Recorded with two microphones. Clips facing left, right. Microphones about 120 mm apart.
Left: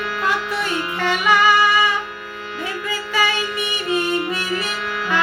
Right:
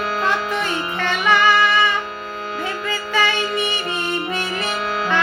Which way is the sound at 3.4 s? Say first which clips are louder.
Right 2 dB; 30° right (ahead or behind).